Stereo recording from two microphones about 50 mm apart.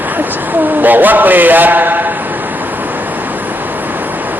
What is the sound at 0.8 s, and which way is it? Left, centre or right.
A man's voice, right.